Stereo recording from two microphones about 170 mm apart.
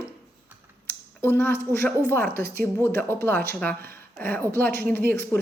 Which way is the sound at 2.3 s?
60° right (ahead or behind).